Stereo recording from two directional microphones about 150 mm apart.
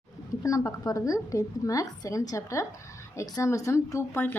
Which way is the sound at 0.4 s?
20° left (ahead or behind).